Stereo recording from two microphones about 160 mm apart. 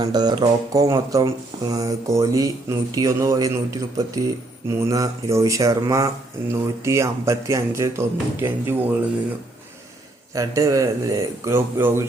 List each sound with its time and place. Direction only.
0.0 s speech: 25° right (ahead or behind)
10.3 s speech: 20° right (ahead or behind)